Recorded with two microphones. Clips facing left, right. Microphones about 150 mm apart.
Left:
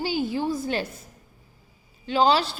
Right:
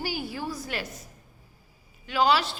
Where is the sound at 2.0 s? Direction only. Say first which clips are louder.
Left 3 dB; 30° left (ahead or behind).